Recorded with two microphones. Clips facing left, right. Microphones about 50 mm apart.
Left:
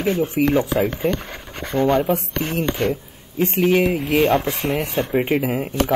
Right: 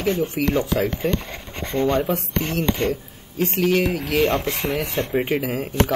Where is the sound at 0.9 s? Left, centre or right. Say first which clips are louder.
Left 1 dB; centre.